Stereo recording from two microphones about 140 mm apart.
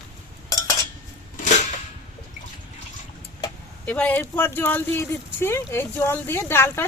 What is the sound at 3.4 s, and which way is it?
Speech, 10° left (ahead or behind).